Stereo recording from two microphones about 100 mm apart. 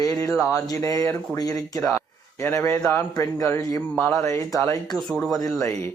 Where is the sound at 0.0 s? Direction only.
35° left (ahead or behind).